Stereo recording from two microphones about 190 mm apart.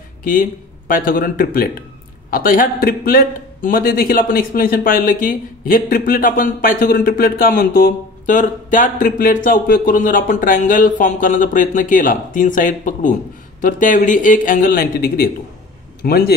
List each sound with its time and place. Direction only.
0.2 s a man's voice: 45° left (ahead or behind)